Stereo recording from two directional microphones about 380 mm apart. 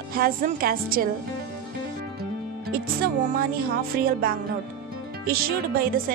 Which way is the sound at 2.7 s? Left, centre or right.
Right.